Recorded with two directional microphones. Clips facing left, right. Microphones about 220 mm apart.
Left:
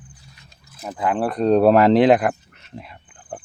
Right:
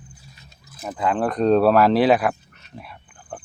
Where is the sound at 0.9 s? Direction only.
10° left (ahead or behind).